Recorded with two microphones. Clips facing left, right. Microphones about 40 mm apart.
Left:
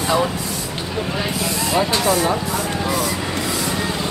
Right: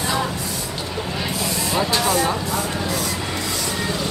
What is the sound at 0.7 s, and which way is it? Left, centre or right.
Vehicle, centre.